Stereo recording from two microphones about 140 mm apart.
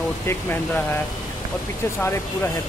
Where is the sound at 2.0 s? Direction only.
20° left (ahead or behind).